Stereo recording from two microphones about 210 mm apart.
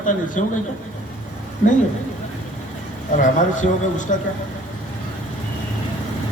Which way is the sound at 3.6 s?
35° left (ahead or behind).